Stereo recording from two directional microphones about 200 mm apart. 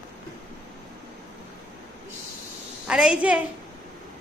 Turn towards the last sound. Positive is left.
turn(degrees=-5)  # may be behind; listen again after turning